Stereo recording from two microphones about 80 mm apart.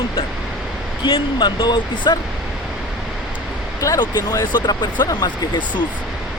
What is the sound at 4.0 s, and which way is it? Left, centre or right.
Speech, left.